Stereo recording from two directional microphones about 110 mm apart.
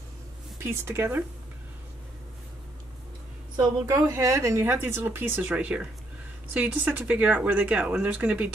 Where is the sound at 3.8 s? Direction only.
30° right (ahead or behind).